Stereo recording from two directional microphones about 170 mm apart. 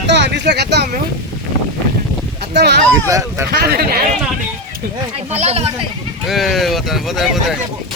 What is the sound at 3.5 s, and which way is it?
Speech, 65° right (ahead or behind).